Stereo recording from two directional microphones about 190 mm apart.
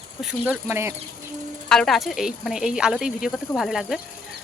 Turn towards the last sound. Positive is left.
turn(degrees=0)  # may be behind; listen again after turning